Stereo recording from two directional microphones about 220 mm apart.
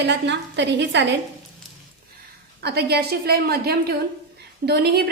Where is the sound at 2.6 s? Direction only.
45° right (ahead or behind).